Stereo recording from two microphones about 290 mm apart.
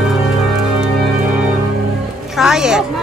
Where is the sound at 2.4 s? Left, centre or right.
Centre.